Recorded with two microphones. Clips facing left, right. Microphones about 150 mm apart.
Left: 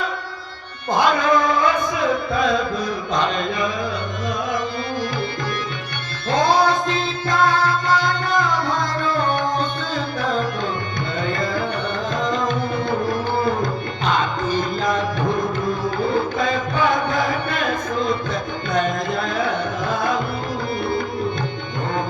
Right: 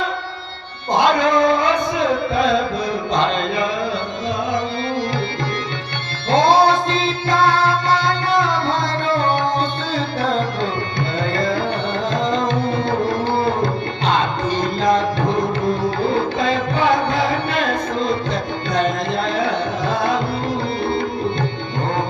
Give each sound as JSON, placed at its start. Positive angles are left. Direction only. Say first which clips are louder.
{"t": 0.9, "sound": "music", "louder": "right 2 dB", "side_deg": -25}
{"t": 3.2, "sound": "carnatic music", "louder": "right 2 dB", "side_deg": -30}
{"t": 6.3, "sound": "music", "louder": "right 4 dB", "side_deg": -25}
{"t": 10.2, "sound": "tabla", "louder": "right 2 dB", "side_deg": -30}
{"t": 12.1, "sound": "tabla", "louder": "right 2 dB", "side_deg": -25}
{"t": 13.4, "sound": "music", "louder": "right 2 dB", "side_deg": -30}
{"t": 18.7, "sound": "tabla", "louder": "right 1 dB", "side_deg": -30}